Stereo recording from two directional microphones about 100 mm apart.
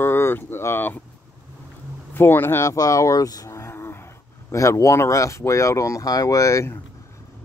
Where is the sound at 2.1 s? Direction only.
20° left (ahead or behind).